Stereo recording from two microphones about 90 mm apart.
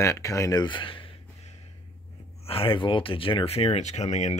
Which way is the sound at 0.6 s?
70° left (ahead or behind).